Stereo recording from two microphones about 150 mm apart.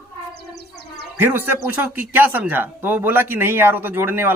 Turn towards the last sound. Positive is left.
turn(degrees=-15)  # may be behind; listen again after turning